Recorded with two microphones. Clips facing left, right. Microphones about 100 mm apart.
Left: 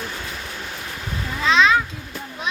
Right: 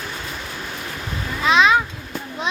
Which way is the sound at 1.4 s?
15° right (ahead or behind).